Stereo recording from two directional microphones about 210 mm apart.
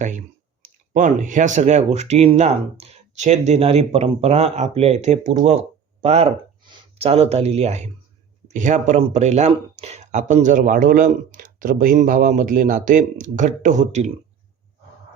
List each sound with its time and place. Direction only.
0.6 s speech: 35° right (ahead or behind)